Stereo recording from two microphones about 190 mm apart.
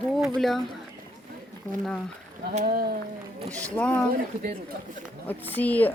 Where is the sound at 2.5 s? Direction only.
50° right (ahead or behind).